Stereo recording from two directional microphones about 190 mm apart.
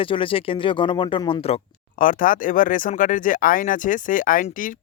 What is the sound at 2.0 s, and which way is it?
Speech, 45° left (ahead or behind).